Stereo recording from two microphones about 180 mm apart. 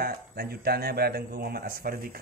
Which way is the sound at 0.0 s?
55° right (ahead or behind).